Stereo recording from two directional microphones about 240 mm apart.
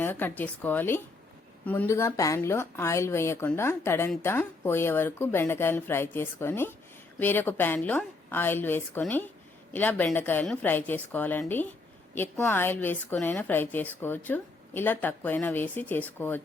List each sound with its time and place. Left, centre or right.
0.0 s speech: centre